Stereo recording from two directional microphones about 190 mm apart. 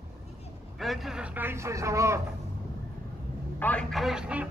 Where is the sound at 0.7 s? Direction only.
Centre (ahead or behind).